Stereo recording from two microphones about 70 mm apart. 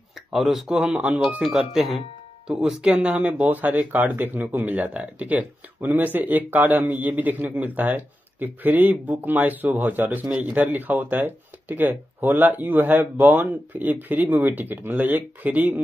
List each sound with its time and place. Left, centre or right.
0.3 s speech: centre; by 1.4 s right
1.4 s speech: centre; by 15.8 s right